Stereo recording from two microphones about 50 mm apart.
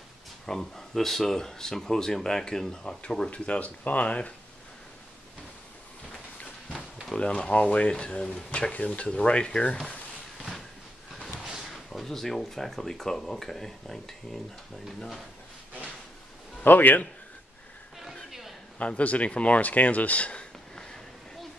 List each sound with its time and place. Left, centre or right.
0.5 s speech: centre; by 4.3 s left
7.2 s speech: left
11.7 s speech: centre
16.6 s a man's voice: left
18.8 s speech: left